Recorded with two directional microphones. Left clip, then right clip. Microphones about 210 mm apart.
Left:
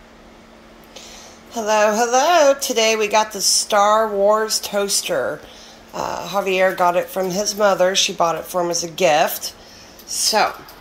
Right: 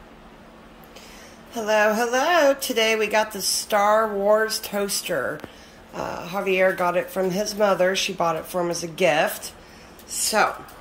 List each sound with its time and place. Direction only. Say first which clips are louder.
1.5 s speech: left 3 dB; 5° right (ahead or behind)